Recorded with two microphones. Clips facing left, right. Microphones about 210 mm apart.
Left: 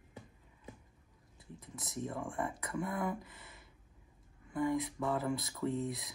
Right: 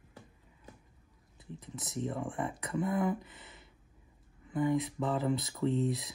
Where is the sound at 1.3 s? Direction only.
25° right (ahead or behind).